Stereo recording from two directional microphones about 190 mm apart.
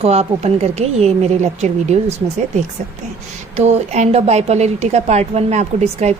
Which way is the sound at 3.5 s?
35° right (ahead or behind).